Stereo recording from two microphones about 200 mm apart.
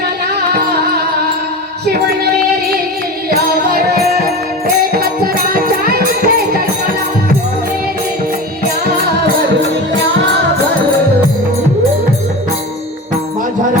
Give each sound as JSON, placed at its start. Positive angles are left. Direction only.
{"t": 0.3, "sound": "music", "side_deg": -55}
{"t": 3.2, "sound": "music", "side_deg": -50}